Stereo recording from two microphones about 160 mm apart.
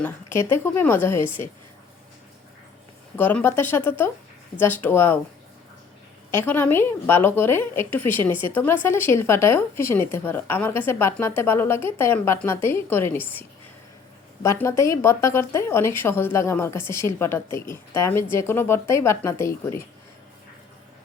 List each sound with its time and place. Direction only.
0.0 s speech: 15° left (ahead or behind)
3.2 s speech: 10° left (ahead or behind)
6.3 s speech: 10° left (ahead or behind)
14.4 s speech: 15° left (ahead or behind)